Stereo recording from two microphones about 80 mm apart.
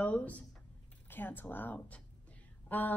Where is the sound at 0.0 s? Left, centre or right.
Centre.